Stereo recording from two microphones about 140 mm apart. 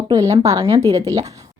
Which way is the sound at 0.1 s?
20° right (ahead or behind).